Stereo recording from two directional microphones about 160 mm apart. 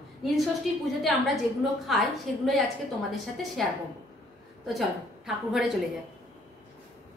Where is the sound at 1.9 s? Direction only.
Centre (ahead or behind).